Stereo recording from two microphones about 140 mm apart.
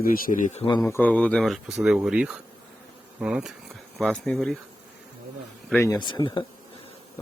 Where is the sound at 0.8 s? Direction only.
15° left (ahead or behind); by 3.5 s 5° right (ahead or behind).